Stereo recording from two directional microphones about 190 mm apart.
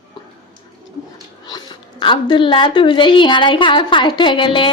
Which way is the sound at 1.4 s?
25° left (ahead or behind).